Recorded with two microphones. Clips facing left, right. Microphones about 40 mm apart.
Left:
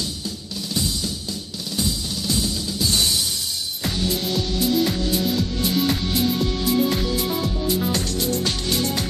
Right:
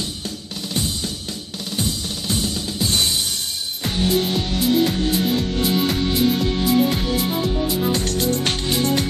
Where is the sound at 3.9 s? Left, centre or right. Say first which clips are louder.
Right 5 dB; right.